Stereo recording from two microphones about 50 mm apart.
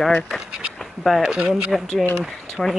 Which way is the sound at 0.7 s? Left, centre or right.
Centre.